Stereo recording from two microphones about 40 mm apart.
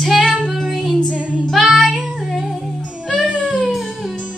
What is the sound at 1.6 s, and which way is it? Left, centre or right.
Child singing, centre.